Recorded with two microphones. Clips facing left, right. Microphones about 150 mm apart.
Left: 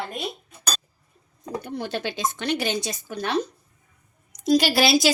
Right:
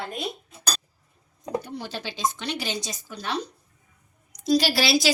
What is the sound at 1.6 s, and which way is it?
A woman's voice, 55° left (ahead or behind).